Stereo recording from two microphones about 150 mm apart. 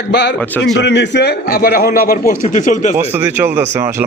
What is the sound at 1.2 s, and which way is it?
A man's voice, 90° left.